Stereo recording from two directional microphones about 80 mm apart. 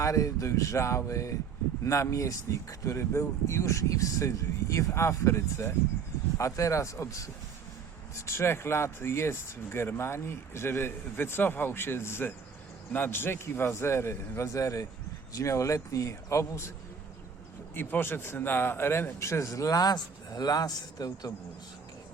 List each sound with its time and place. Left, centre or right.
0.0 s speech: left
17.7 s speech: left